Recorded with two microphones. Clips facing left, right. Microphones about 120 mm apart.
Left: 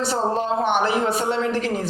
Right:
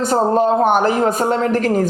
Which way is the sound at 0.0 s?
45° right (ahead or behind).